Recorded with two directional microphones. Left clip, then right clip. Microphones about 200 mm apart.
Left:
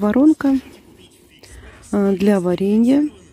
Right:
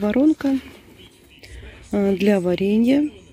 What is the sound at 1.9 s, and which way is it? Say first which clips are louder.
Speech: left 2 dB; 15° left (ahead or behind).